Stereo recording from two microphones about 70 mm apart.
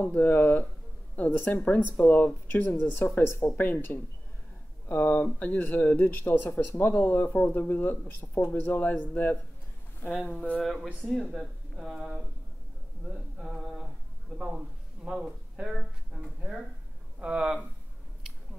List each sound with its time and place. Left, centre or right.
0.0 s speech: left
10.6 s speech: centre
13.4 s a sound: centre
15.0 s speech: centre
17.2 s speech: centre